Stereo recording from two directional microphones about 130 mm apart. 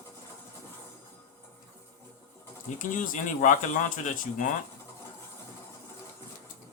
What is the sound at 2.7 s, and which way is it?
Speech, 90° left.